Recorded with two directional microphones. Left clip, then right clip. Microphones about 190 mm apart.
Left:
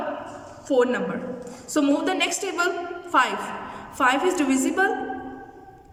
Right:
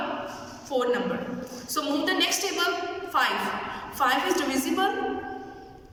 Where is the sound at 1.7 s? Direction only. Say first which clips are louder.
Left 4 dB; 70° left (ahead or behind).